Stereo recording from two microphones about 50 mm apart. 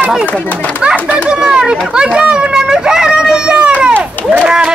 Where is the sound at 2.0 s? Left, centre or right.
Right.